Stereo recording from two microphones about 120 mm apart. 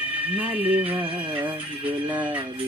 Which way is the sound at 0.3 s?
15° right (ahead or behind).